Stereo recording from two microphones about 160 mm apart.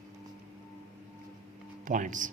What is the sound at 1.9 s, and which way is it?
Speech, 55° right (ahead or behind).